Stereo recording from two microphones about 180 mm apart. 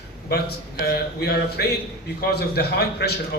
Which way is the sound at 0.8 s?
65° left (ahead or behind).